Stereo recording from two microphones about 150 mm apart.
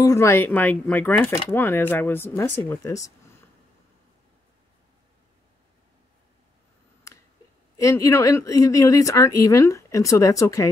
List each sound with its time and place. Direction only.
0.0 s speech: 20° left (ahead or behind)
7.7 s speech: 20° left (ahead or behind)